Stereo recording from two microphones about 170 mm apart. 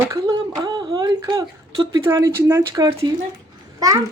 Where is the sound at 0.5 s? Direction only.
25° right (ahead or behind).